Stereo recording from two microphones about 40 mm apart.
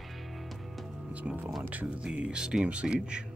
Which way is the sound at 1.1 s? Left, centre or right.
Right.